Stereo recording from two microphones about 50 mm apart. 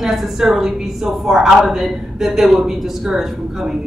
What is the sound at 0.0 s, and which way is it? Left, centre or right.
A woman's voice, centre.